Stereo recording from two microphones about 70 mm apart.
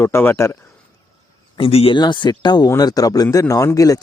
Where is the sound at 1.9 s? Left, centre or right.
Left.